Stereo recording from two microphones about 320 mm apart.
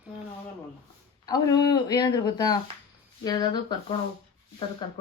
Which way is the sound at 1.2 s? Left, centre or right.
Centre.